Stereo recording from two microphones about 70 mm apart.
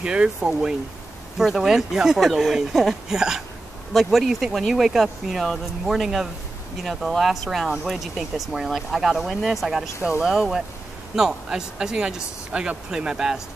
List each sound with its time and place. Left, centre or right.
0.0 s speech: centre